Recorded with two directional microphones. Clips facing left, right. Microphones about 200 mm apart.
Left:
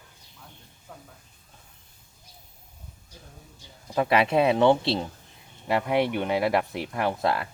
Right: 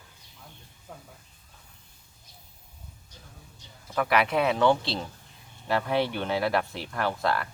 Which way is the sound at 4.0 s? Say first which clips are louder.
Left 3 dB; 25° left (ahead or behind).